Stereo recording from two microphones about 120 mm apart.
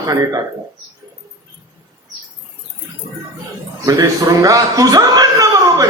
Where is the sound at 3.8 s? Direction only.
30° right (ahead or behind).